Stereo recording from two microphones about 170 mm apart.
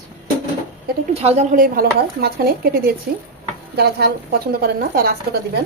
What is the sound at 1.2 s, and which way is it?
Speech, 40° right (ahead or behind).